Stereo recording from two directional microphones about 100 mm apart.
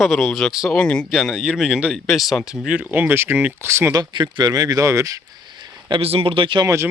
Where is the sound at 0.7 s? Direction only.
10° left (ahead or behind); by 3.9 s 25° right (ahead or behind).